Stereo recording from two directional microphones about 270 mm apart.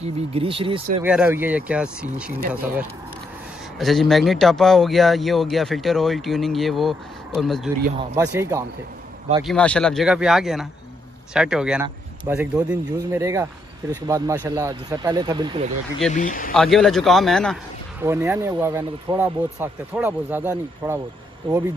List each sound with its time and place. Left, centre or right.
0.0 s speech: right
1.0 s speech: centre
3.7 s speech: centre
9.4 s speech: centre
16.1 s speech: left
16.5 s speech: centre
18.0 s speech: centre